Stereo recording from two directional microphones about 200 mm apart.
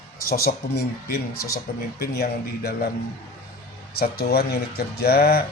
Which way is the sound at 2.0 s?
50° left (ahead or behind).